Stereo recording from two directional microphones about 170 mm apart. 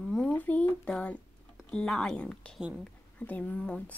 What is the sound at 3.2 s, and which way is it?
Speech, 10° left (ahead or behind).